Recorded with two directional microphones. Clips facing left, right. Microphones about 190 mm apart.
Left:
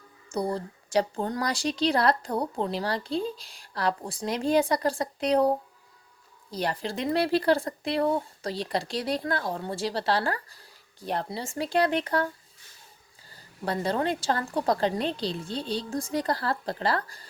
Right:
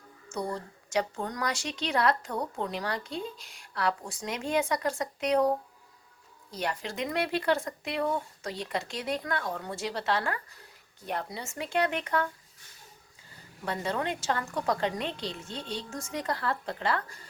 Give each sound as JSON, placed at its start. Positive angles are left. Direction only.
{"t": 0.3, "sound": "speech", "side_deg": 35}
{"t": 6.5, "sound": "speech", "side_deg": 35}
{"t": 13.3, "sound": "speech", "side_deg": 35}